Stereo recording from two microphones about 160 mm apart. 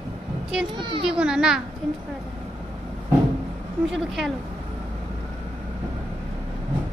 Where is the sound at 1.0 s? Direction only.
5° right (ahead or behind).